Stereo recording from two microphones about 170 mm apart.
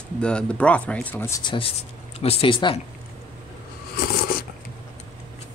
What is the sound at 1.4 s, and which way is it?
Speech, 30° left (ahead or behind).